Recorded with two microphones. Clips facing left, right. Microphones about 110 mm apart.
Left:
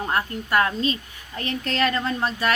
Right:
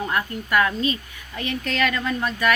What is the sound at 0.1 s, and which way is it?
Speech, 35° left (ahead or behind).